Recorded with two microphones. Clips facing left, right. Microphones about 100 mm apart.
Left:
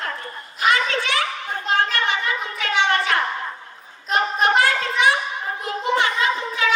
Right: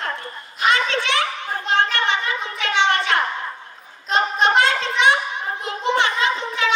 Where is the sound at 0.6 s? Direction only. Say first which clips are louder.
Right 1 dB; 25° right (ahead or behind).